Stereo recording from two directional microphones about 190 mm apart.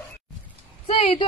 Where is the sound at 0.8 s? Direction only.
30° left (ahead or behind).